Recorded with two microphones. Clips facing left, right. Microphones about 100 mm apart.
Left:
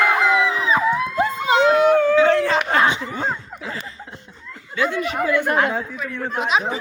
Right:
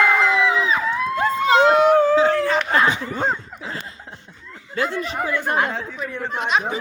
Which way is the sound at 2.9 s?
40° right (ahead or behind).